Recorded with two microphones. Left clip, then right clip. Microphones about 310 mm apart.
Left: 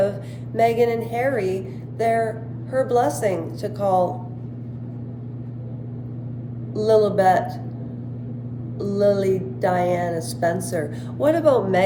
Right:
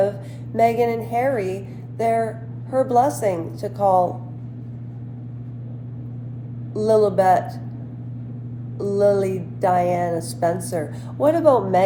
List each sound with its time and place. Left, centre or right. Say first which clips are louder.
0.0 s a woman's voice: right 1 dB; centre
2.7 s music: right 2 dB; centre
6.7 s music: even; centre
8.8 s music: right 1 dB; right